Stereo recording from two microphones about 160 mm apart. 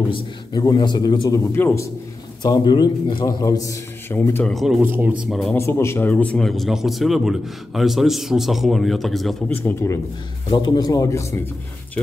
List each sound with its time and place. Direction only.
0.1 s a man's voice: 25° left (ahead or behind)
1.5 s a man's voice: 15° left (ahead or behind)
2.4 s a man's voice: 25° left (ahead or behind)
4.5 s speech: centre (ahead or behind)
5.6 s speech: 15° left (ahead or behind); by 9.6 s centre (ahead or behind)
9.6 s a man's voice: 15° left (ahead or behind)